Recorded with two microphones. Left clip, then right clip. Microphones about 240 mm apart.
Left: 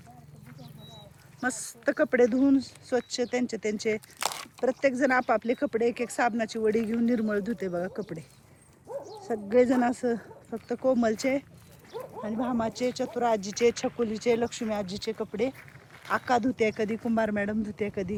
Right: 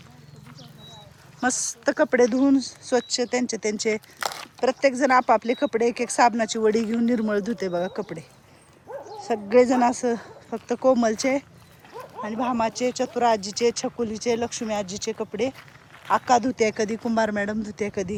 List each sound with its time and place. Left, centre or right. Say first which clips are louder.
1.4 s speech: right 7 dB; centre
4.2 s a sound: right 3 dB; left
4.6 s speech: right 5 dB; centre